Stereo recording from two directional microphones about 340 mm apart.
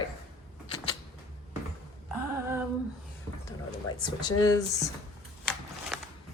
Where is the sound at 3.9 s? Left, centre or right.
Centre.